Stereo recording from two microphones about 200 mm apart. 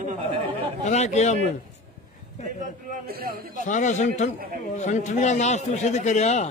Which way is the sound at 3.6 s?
40° left (ahead or behind).